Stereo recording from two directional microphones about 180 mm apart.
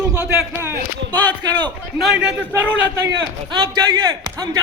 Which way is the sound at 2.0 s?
5° right (ahead or behind).